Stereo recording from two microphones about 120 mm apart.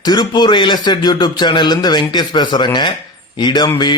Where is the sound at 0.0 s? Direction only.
35° left (ahead or behind).